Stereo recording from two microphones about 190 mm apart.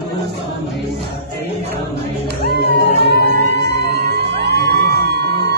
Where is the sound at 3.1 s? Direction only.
55° right (ahead or behind).